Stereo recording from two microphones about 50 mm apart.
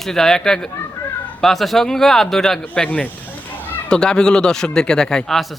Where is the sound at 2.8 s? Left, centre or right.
Left.